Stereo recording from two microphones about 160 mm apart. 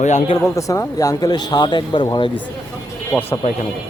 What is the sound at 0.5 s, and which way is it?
Speech, 20° left (ahead or behind).